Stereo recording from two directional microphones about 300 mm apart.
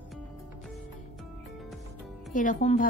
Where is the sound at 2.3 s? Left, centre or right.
Left.